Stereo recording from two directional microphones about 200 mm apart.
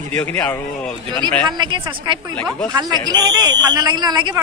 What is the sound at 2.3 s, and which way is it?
Speech, 5° left (ahead or behind).